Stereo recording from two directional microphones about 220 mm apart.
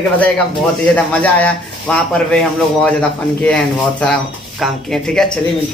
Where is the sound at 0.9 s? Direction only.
5° left (ahead or behind).